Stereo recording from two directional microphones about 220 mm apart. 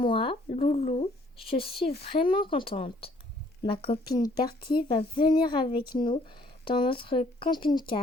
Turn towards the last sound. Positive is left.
turn(degrees=20)  # may be behind; listen again after turning